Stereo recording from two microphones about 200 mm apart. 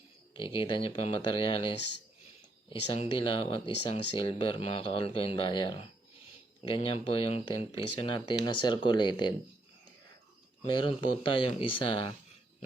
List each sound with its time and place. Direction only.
0.3 s speech: 25° left (ahead or behind)
10.7 s speech: 25° left (ahead or behind)